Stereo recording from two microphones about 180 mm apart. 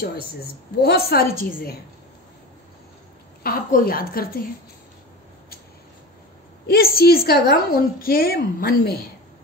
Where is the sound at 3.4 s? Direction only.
50° left (ahead or behind).